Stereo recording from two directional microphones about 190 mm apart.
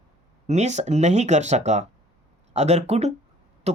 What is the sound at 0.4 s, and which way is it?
Speech, 35° right (ahead or behind).